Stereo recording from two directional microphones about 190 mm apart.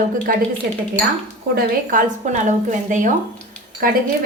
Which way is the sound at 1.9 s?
45° right (ahead or behind).